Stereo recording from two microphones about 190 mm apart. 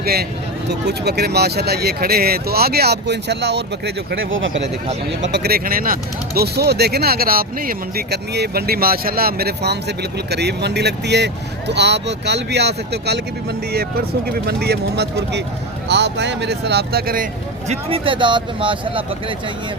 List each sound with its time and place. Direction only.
0.0 s speech: 55° right (ahead or behind); by 4.7 s 75° right (ahead or behind)
5.2 s speech: 60° right (ahead or behind)
14.3 s speech: 55° right (ahead or behind)
17.7 s speech: 30° right (ahead or behind)